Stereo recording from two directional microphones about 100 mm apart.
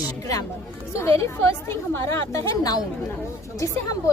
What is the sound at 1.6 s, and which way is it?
Speech, 25° left (ahead or behind).